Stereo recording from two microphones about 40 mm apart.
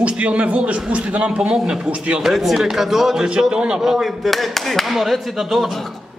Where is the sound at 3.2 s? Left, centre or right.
Centre.